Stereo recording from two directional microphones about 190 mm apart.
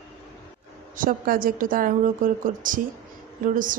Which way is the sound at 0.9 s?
45° right (ahead or behind).